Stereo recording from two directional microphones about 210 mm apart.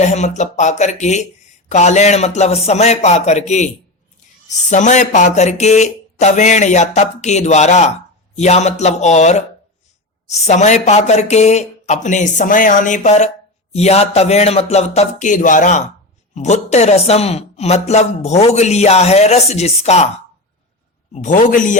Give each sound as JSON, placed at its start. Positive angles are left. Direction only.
{"t": 0.0, "sound": "a woman's voice", "side_deg": 35}
{"t": 21.1, "sound": "a woman's voice", "side_deg": 40}